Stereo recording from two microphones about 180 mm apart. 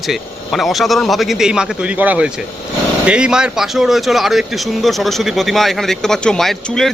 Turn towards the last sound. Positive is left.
turn(degrees=0)  # may be behind; listen again after turning